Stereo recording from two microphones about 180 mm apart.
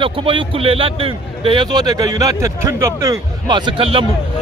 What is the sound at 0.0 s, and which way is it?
A man's voice, 30° right (ahead or behind).